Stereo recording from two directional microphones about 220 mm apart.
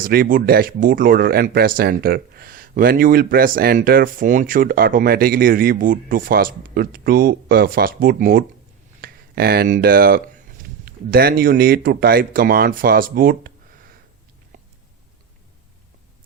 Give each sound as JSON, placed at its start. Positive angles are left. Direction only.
{"t": 0.0, "sound": "a man's voice", "side_deg": -40}